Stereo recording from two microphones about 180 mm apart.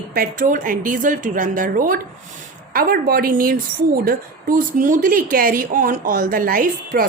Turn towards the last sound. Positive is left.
turn(degrees=-50)  # may be behind; listen again after turning